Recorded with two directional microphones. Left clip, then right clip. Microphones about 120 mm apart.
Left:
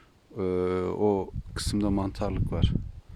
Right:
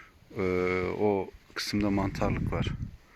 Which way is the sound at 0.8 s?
90° left.